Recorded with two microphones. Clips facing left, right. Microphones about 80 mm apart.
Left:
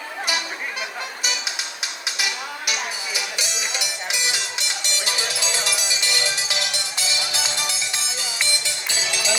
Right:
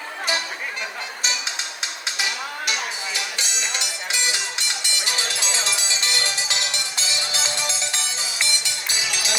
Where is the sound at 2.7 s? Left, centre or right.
Centre.